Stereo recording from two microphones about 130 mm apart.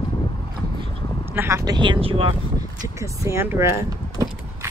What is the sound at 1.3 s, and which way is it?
Speech, 20° right (ahead or behind).